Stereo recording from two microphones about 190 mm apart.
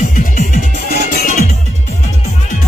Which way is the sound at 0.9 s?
45° left (ahead or behind).